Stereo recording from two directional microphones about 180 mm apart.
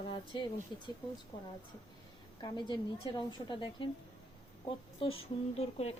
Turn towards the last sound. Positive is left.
turn(degrees=35)  # may be behind; listen again after turning